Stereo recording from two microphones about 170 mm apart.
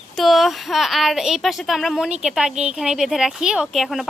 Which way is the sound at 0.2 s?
Centre (ahead or behind).